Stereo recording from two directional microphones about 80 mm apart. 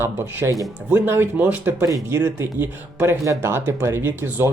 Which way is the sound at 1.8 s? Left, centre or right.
Right.